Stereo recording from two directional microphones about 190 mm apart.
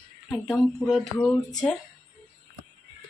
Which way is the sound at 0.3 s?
Centre (ahead or behind).